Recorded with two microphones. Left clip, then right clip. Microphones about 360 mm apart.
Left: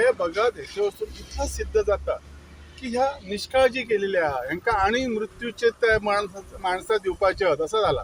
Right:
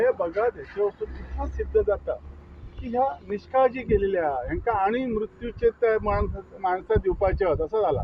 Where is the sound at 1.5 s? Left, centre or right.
Right.